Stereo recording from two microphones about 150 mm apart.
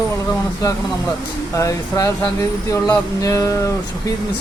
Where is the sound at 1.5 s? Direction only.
20° left (ahead or behind).